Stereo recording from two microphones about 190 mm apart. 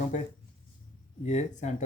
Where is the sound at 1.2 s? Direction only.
40° left (ahead or behind).